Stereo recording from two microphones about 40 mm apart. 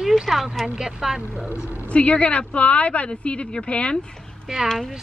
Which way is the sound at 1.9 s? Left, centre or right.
Left.